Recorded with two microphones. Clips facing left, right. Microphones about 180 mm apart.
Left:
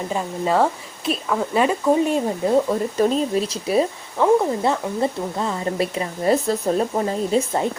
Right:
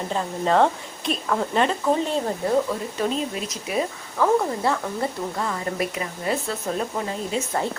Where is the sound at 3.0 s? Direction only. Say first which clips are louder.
Left 7 dB; 35° left (ahead or behind).